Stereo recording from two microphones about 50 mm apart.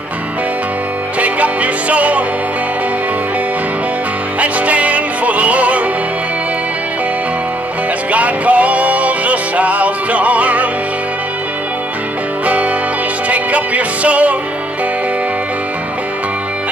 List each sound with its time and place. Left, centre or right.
1.2 s music: right
4.4 s music: right
8.1 s music: right
13.3 s music: right